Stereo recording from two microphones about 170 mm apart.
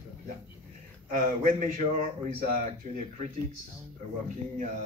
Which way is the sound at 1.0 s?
50° right (ahead or behind).